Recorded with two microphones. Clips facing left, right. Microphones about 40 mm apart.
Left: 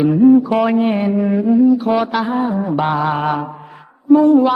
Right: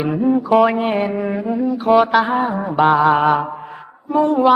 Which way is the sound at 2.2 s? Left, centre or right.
Centre.